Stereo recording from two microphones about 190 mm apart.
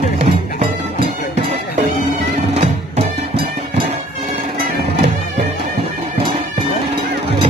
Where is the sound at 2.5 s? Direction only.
35° right (ahead or behind).